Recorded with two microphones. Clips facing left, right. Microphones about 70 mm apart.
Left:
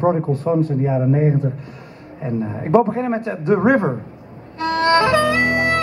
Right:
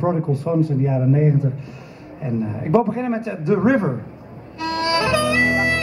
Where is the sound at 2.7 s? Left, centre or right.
Centre.